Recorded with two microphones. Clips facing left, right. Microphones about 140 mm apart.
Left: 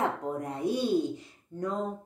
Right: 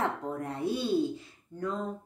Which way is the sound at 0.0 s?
15° left (ahead or behind).